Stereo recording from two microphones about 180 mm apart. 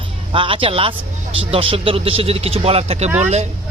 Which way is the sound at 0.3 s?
30° right (ahead or behind).